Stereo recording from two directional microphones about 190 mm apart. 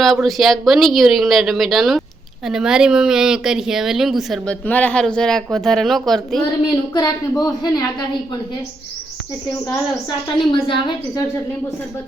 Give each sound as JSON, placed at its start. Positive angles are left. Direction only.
{"t": 0.0, "sound": "speech", "side_deg": 0}
{"t": 6.9, "sound": "a woman's voice", "side_deg": 20}
{"t": 10.5, "sound": "a woman's voice", "side_deg": 25}